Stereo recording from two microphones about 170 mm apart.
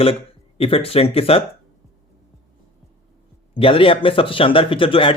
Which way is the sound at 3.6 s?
30° left (ahead or behind).